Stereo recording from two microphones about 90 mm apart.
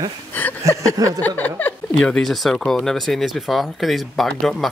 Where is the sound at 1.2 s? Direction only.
20° left (ahead or behind).